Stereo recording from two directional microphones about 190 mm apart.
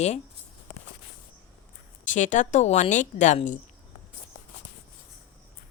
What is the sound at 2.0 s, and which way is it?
Speech, 40° left (ahead or behind).